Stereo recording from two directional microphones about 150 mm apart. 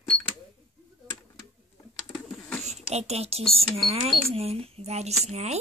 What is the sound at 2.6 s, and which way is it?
Speech, 45° right (ahead or behind).